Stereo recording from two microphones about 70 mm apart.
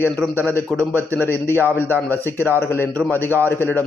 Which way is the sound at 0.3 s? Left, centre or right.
Left.